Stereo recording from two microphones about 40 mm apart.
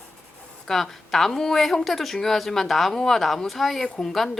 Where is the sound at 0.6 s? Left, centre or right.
Centre.